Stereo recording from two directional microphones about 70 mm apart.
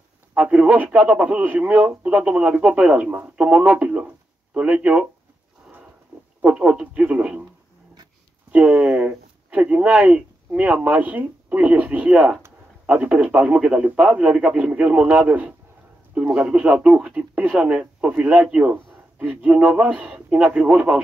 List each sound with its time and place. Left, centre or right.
0.3 s speech: centre
6.4 s speech: centre
8.5 s speech: right